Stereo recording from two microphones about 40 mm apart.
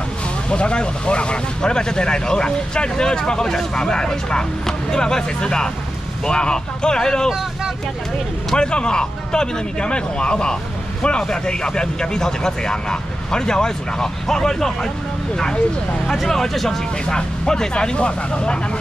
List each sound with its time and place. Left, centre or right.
0.5 s speech: left
8.5 s speech: left
16.3 s speech: centre; by 18.6 s left